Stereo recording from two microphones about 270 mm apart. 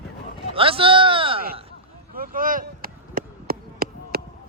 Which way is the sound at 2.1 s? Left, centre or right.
Right.